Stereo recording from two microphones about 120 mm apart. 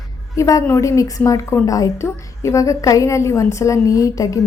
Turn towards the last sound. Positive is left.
turn(degrees=30)  # may be behind; listen again after turning